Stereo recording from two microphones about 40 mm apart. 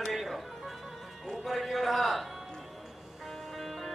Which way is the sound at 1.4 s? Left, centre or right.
Centre.